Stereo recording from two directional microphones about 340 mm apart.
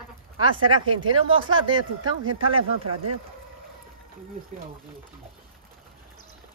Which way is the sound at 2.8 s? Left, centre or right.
Right.